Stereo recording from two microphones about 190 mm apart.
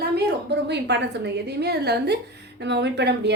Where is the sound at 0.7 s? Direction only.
65° right (ahead or behind).